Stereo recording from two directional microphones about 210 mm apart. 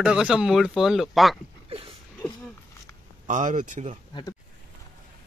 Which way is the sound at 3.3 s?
40° right (ahead or behind).